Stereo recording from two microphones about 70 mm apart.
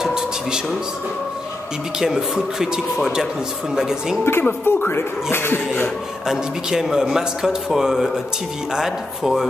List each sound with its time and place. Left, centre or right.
0.0 s a sound: centre
2.0 s a man's voice: centre
4.2 s speech: left
6.2 s a man's voice: centre